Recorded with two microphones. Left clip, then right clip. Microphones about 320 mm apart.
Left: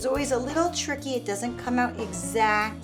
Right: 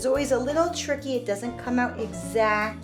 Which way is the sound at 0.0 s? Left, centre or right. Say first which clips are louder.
Right 3 dB; left.